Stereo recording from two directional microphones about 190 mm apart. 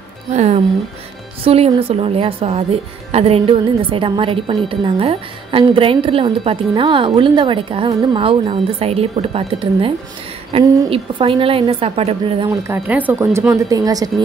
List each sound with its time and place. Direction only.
0.3 s speech: 35° right (ahead or behind)
12.6 s speech: 10° right (ahead or behind)